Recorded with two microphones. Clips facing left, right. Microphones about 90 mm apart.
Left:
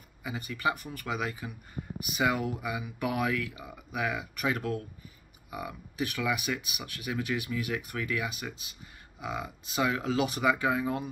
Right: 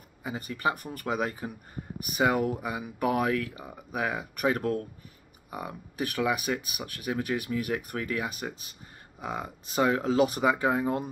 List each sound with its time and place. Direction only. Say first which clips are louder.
0.2 s speech: right 2 dB; 35° right (ahead or behind)